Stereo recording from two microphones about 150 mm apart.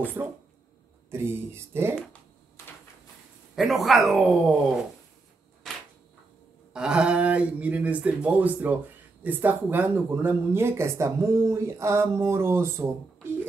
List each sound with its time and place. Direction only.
0.0 s speech: 15° right (ahead or behind)
3.5 s speech: centre (ahead or behind)
5.6 s a sound: centre (ahead or behind)
6.7 s speech: 5° right (ahead or behind)